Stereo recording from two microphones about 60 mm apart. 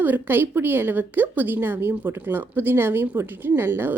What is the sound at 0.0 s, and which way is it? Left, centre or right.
A woman's voice, right.